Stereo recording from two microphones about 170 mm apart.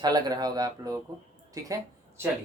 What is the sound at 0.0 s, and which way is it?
Speech, 25° right (ahead or behind).